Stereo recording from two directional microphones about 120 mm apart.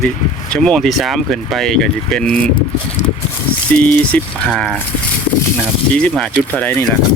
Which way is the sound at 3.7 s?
15° left (ahead or behind).